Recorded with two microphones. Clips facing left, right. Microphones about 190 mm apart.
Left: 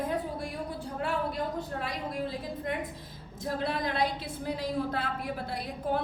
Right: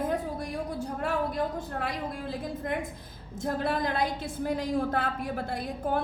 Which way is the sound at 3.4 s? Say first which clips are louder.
Right 3 dB; 50° right (ahead or behind).